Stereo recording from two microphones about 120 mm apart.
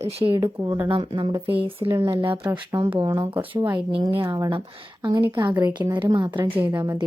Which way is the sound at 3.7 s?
40° right (ahead or behind).